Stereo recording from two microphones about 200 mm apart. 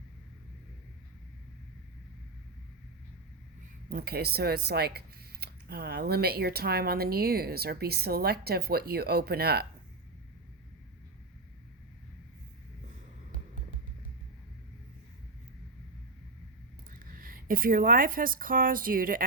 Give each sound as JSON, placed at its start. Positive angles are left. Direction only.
{"t": 3.8, "sound": "speech", "side_deg": -50}
{"t": 17.2, "sound": "speech", "side_deg": -45}